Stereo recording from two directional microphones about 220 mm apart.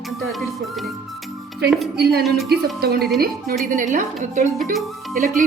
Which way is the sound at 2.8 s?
45° right (ahead or behind).